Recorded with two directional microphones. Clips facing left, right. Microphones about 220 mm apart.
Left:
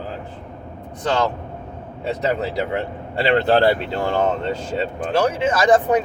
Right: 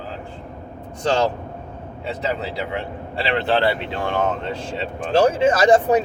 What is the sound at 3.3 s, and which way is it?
Speech, 40° left (ahead or behind).